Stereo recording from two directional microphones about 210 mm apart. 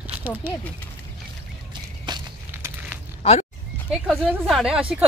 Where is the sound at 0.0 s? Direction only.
10° right (ahead or behind).